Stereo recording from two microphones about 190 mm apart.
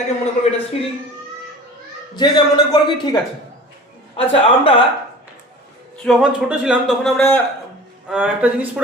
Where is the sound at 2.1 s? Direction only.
25° left (ahead or behind).